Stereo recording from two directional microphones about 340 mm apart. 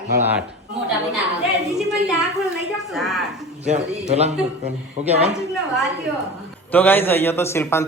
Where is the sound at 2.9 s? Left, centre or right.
Centre.